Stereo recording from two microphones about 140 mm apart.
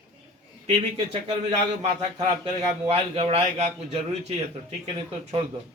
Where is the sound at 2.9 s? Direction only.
45° right (ahead or behind).